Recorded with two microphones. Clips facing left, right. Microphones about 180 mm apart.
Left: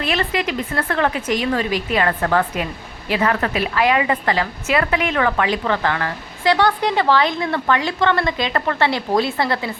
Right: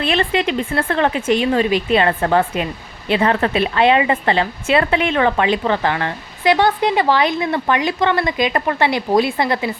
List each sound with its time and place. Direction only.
0.0 s speech: 25° right (ahead or behind)